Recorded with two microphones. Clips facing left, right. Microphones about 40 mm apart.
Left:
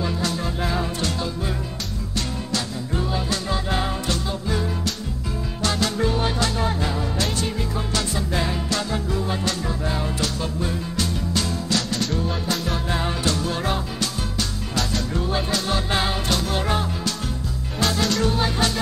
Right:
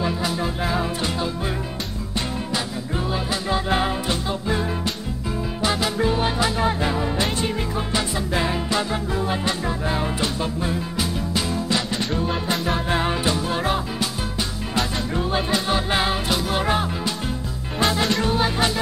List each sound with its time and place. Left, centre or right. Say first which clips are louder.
0.0 s music: right 2 dB; centre
3.1 s music: right 4 dB; centre